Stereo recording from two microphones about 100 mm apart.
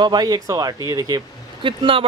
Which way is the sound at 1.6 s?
60° right (ahead or behind).